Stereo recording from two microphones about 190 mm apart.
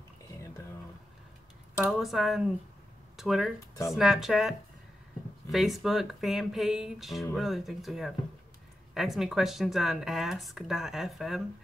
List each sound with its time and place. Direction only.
1.9 s speech: centre (ahead or behind)
3.5 s speech: 15° left (ahead or behind)
3.9 s speech: centre (ahead or behind)